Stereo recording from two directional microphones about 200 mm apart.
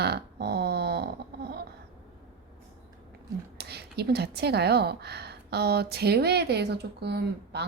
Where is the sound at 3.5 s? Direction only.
55° right (ahead or behind).